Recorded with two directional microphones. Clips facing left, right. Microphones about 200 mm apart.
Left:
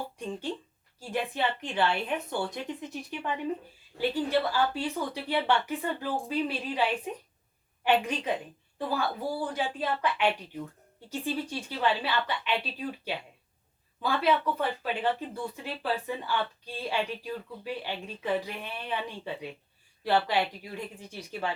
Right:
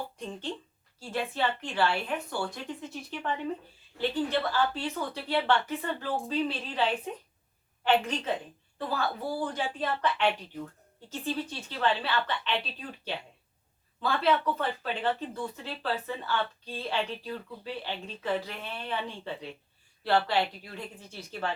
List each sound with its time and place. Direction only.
0.9 s speech: 15° left (ahead or behind)
14.0 s speech: 10° left (ahead or behind)